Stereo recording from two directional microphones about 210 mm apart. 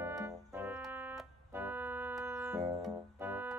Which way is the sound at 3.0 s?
10° right (ahead or behind).